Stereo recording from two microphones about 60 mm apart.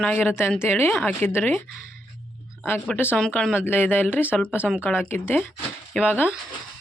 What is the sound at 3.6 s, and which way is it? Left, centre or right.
Speech, left.